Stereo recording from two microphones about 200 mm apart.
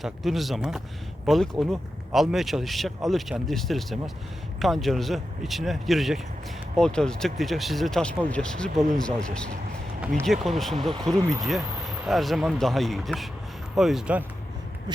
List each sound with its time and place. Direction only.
0.0 s speech: centre (ahead or behind)
11.1 s speech: 15° right (ahead or behind)
12.0 s speech: centre (ahead or behind)
14.9 s a sound: 20° right (ahead or behind)